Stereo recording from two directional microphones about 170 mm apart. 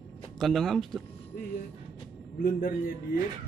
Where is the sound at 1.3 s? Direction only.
55° left (ahead or behind).